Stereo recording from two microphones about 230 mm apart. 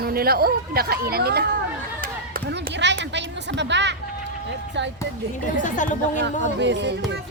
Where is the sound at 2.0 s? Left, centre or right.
Right.